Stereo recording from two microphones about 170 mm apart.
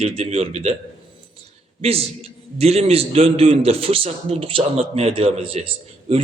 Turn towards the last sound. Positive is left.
turn(degrees=-35)  # may be behind; listen again after turning